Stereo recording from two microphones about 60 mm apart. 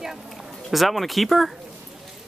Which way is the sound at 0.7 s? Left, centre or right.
Centre.